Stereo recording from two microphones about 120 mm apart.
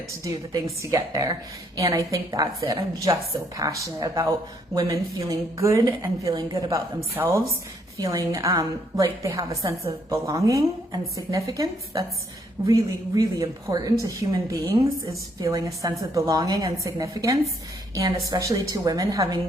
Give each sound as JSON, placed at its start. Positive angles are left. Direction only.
{"t": 0.3, "sound": "a woman's voice", "side_deg": -25}